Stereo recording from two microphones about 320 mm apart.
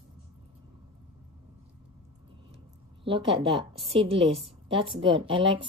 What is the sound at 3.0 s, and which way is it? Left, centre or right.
A woman's voice, centre.